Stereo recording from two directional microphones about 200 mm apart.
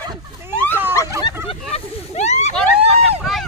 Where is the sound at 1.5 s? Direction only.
30° left (ahead or behind).